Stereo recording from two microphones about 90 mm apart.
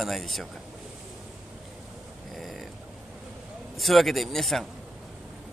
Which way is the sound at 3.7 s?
Centre (ahead or behind).